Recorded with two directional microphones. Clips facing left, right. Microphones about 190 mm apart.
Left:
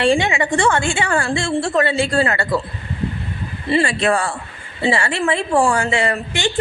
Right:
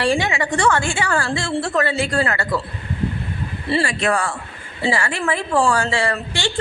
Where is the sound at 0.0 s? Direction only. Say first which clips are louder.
Left 3 dB; 25° left (ahead or behind).